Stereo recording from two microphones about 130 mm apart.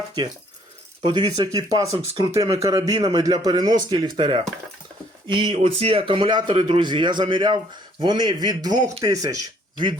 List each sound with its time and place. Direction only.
1.0 s speech: 35° right (ahead or behind)